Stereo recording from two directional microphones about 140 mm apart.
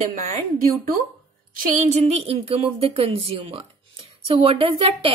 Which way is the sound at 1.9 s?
45° right (ahead or behind).